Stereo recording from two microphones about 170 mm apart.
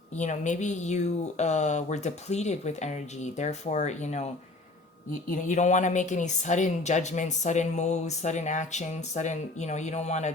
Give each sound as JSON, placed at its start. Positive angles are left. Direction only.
{"t": 0.2, "sound": "speech", "side_deg": 45}
{"t": 5.3, "sound": "speech", "side_deg": 45}